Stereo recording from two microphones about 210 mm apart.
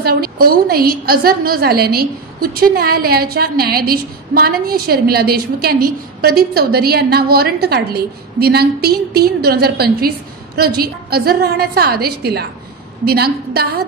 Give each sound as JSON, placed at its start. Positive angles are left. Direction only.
{"t": 0.0, "sound": "a woman's voice", "side_deg": -45}